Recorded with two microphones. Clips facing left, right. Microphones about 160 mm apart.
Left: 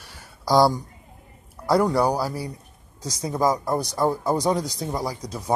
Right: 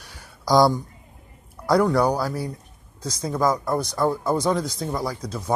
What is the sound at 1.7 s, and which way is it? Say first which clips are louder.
Speech: right 1 dB; 5° left (ahead or behind).